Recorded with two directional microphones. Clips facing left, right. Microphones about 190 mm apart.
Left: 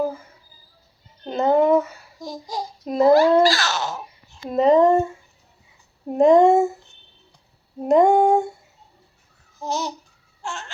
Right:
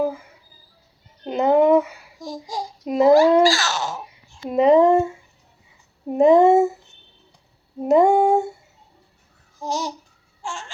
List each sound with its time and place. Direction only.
0.0 s a sound: 15° right (ahead or behind)
2.2 s a child's voice: 10° right (ahead or behind)
4.4 s speech: 10° right (ahead or behind)
6.1 s female singing: 5° right (ahead or behind)
7.8 s female singing: 5° right (ahead or behind)
9.6 s babbling: 10° right (ahead or behind)
10.4 s baby cry: 10° right (ahead or behind)